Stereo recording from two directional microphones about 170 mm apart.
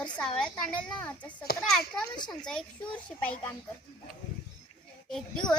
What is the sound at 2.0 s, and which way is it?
Speech, 25° left (ahead or behind).